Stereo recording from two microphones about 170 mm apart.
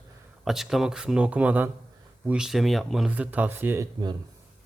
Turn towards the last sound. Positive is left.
turn(degrees=-15)  # may be behind; listen again after turning